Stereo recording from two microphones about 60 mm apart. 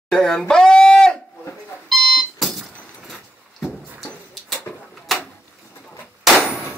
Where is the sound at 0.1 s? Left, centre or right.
Centre.